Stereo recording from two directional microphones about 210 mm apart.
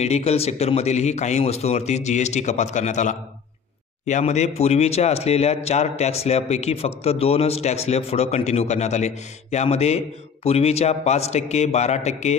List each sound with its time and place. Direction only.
0.0 s a man's voice: 30° left (ahead or behind)